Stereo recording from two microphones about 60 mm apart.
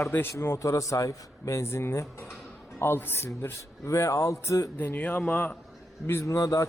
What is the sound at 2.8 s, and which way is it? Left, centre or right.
Speech, left.